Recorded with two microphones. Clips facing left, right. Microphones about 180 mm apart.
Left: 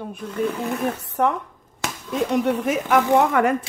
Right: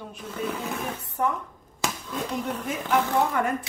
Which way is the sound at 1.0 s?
75° left (ahead or behind).